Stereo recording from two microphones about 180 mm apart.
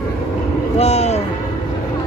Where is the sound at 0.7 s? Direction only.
35° left (ahead or behind).